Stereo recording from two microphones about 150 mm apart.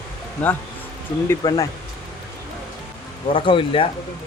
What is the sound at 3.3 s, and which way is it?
Speech, 35° left (ahead or behind).